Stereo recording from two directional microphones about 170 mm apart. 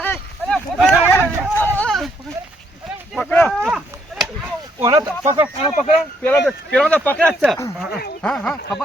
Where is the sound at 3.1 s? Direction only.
10° left (ahead or behind).